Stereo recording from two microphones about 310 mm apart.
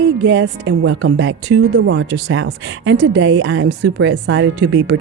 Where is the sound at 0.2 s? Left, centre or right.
Right.